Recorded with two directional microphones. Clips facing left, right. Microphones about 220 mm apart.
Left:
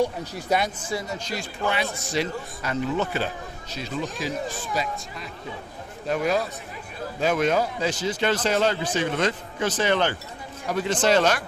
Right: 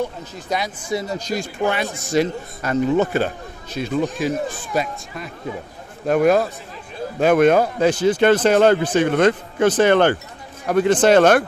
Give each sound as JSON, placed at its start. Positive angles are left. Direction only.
{"t": 0.0, "sound": "speech", "side_deg": 10}
{"t": 1.0, "sound": "speech", "side_deg": -40}